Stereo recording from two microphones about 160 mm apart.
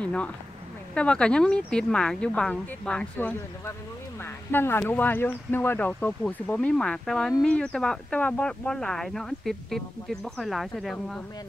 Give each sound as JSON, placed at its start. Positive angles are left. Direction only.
{"t": 0.0, "sound": "speech", "side_deg": 10}